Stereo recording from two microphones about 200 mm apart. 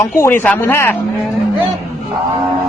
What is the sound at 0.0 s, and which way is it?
Speech, 10° left (ahead or behind).